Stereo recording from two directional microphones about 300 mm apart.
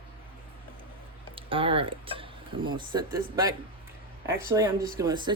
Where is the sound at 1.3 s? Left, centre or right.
Centre.